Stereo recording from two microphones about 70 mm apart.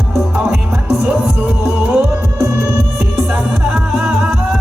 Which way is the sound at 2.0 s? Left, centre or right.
Right.